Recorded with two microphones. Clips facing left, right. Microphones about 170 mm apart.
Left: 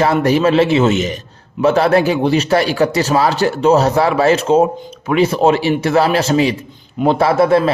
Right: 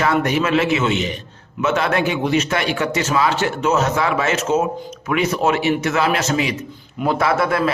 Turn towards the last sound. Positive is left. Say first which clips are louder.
# left 6 dB
turn(degrees=30)  # may be behind; listen again after turning